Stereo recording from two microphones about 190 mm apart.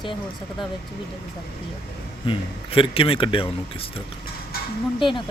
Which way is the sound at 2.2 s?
25° left (ahead or behind).